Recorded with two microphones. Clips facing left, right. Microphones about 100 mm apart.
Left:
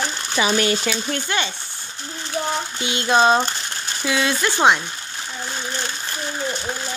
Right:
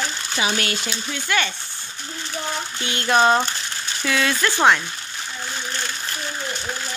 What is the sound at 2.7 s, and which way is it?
Speech, 20° left (ahead or behind).